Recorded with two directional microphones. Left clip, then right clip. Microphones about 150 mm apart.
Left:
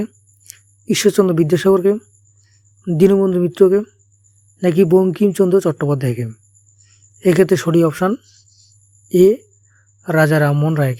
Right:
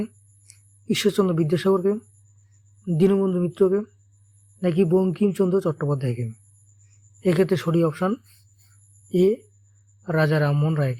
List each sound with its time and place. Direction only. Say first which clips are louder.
0.0 s speech: left 6 dB; 45° left (ahead or behind)